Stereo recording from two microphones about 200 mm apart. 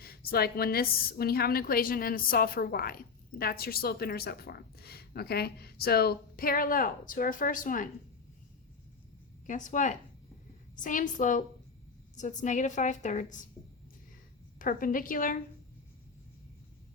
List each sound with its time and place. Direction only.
0.0 s a woman's voice: 50° left (ahead or behind)
9.5 s a woman's voice: 40° left (ahead or behind)
14.6 s a woman's voice: 45° left (ahead or behind)